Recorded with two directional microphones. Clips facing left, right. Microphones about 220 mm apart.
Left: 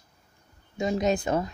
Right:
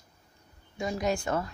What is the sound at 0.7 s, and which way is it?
Speech, 20° left (ahead or behind).